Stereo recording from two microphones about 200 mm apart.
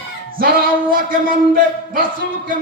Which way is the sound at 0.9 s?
45° right (ahead or behind).